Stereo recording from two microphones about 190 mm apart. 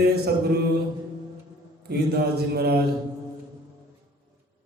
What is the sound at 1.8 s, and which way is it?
Mantra, 60° right (ahead or behind).